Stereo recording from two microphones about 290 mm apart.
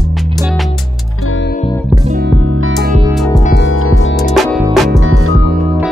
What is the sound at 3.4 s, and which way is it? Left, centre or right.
Music, left.